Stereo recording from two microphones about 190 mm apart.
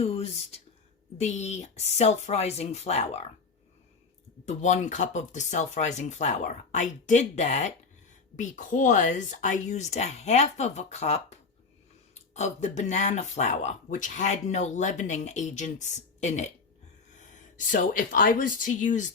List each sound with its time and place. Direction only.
0.0 s speech: 30° left (ahead or behind)
4.4 s speech: 40° left (ahead or behind)
17.7 s speech: 45° left (ahead or behind)